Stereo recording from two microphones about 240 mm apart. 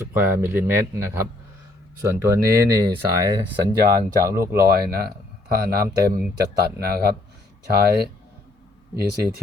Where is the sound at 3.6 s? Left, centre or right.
Centre.